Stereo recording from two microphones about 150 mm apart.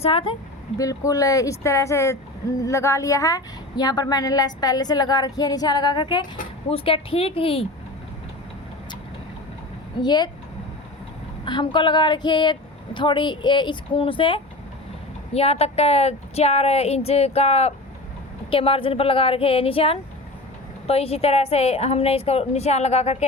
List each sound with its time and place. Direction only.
0.0 s a woman's voice: 40° left (ahead or behind)
0.8 s a woman's voice: 20° left (ahead or behind); by 7.7 s 40° left (ahead or behind)
10.0 s a woman's voice: 30° left (ahead or behind)
11.4 s a woman's voice: 30° left (ahead or behind)